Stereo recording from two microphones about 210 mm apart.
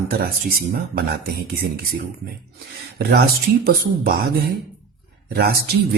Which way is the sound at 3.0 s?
45° right (ahead or behind).